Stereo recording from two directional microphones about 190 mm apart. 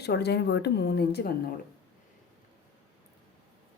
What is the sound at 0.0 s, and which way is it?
A woman's voice, 60° left (ahead or behind).